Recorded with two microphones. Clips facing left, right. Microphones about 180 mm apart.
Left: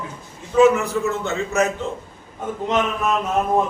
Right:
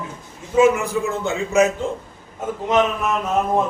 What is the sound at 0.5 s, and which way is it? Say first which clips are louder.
A man's voice: left 1 dB; 15° right (ahead or behind).